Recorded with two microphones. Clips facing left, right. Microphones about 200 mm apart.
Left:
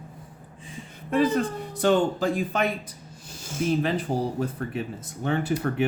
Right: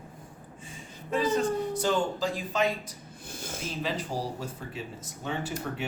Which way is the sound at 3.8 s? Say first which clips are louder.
Left 6 dB; 55° left (ahead or behind).